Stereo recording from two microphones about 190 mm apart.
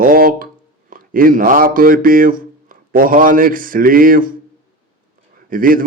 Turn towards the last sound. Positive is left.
turn(degrees=-45)  # may be behind; listen again after turning